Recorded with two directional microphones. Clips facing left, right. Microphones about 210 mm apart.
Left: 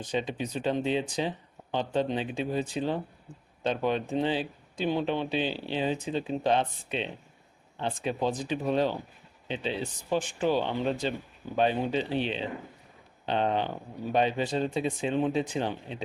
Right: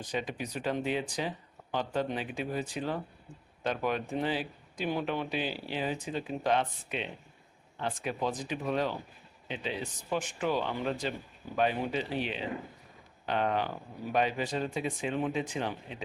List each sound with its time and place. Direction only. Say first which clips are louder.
0.0 s speech: left 4 dB; 25° left (ahead or behind)